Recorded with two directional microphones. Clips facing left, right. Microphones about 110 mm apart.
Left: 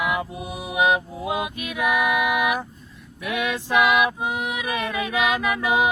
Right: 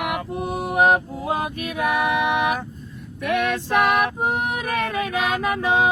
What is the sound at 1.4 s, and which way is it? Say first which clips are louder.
Music: right 1 dB; 35° right (ahead or behind).